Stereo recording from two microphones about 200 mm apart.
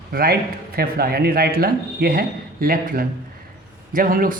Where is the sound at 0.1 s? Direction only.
50° right (ahead or behind).